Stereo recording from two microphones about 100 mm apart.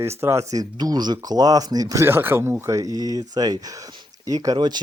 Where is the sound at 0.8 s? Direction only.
45° right (ahead or behind).